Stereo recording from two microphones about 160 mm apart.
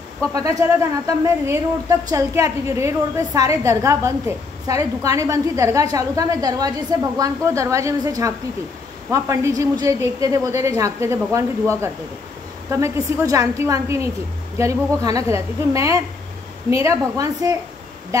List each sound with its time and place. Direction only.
0.2 s speech: 20° right (ahead or behind)